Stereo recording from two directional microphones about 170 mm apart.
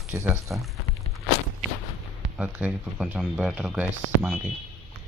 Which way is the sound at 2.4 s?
5° right (ahead or behind).